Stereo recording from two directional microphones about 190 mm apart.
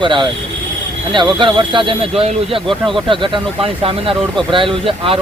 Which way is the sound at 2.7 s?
Centre (ahead or behind).